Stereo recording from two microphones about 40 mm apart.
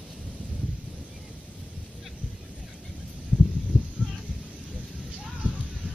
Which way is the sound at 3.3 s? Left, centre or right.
Left.